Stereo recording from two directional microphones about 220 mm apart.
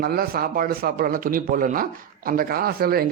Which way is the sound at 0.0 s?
45° right (ahead or behind).